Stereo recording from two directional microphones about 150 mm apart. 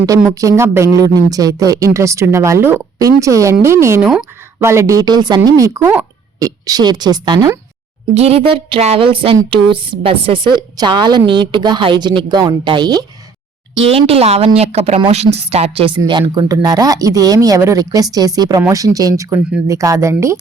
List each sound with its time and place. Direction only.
0.3 s speech: 20° right (ahead or behind)
8.1 s speech: 45° right (ahead or behind); by 13.1 s 30° right (ahead or behind)
13.8 s a woman's voice: 40° right (ahead or behind); by 20.4 s 20° right (ahead or behind)